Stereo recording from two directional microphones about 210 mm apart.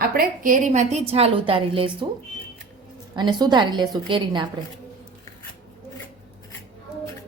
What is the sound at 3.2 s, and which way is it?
A woman's voice, 20° right (ahead or behind).